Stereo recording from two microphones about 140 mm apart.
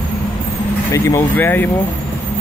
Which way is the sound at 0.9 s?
20° left (ahead or behind).